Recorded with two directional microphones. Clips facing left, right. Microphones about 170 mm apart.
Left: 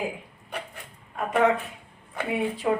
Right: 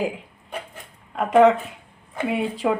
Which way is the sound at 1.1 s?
90° right.